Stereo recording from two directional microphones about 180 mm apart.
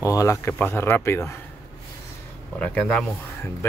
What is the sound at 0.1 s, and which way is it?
Speech, 15° left (ahead or behind).